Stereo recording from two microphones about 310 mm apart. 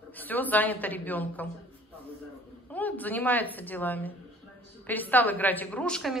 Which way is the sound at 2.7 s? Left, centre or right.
Centre.